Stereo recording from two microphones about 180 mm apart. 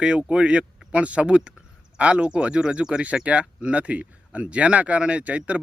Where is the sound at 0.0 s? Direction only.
5° right (ahead or behind).